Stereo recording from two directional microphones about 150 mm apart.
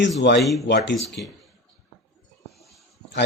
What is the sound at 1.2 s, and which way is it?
Speech, 90° left.